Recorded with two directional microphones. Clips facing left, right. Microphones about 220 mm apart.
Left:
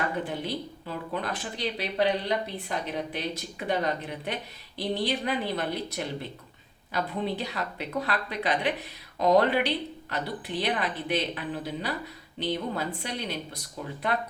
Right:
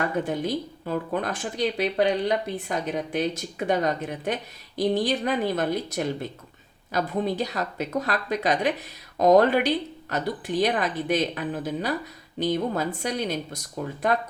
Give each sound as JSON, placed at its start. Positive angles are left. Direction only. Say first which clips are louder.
{"t": 0.3, "sound": "speech", "louder": "right 5 dB", "side_deg": -45}